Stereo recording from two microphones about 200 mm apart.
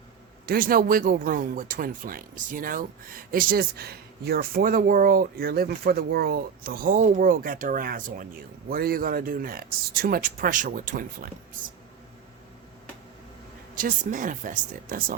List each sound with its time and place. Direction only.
0.4 s speech: 45° right (ahead or behind)
13.7 s speech: 40° right (ahead or behind)